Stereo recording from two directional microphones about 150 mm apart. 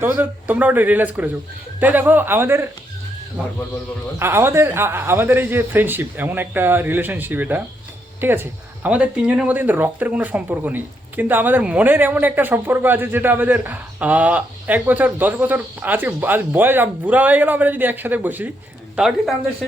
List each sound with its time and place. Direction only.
0.0 s speech: 10° right (ahead or behind)
4.2 s speech: 15° right (ahead or behind)